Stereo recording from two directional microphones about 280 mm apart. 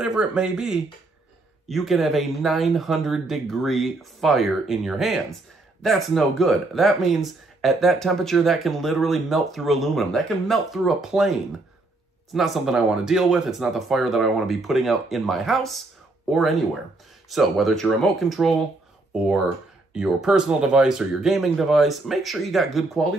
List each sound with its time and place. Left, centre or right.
0.0 s speech: centre
19.9 s speech: centre